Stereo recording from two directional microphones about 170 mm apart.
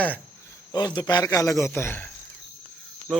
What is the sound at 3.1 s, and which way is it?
Cricket, centre (ahead or behind).